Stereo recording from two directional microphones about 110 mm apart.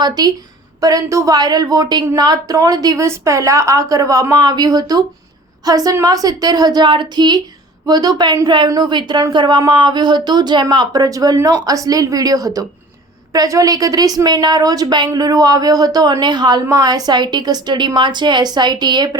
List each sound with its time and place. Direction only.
0.0 s a woman's voice: 35° right (ahead or behind)